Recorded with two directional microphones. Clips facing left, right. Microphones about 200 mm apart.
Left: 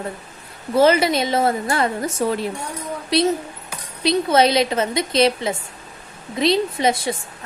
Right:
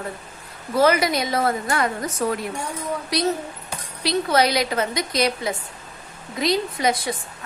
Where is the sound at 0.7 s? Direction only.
25° left (ahead or behind).